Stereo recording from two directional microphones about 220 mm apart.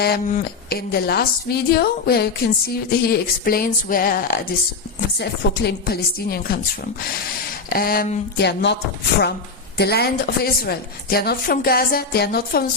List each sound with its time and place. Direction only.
0.0 s a woman's voice: 40° left (ahead or behind)
7.7 s a woman's voice: 40° left (ahead or behind)